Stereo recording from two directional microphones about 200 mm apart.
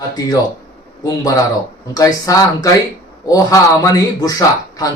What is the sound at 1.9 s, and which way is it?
A man's voice, 20° left (ahead or behind).